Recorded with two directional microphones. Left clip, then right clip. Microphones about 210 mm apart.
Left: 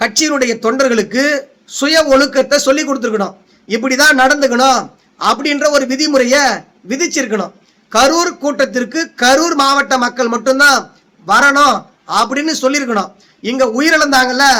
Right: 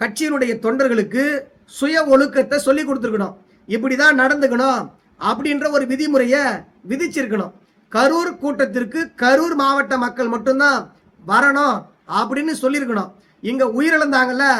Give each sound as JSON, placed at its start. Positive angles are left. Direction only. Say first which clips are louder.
{"t": 0.0, "sound": "a man's voice", "louder": "left 6 dB", "side_deg": -5}